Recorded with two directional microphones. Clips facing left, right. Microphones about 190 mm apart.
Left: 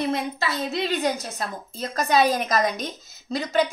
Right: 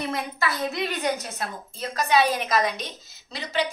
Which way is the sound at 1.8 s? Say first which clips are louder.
Left 1 dB; 40° left (ahead or behind).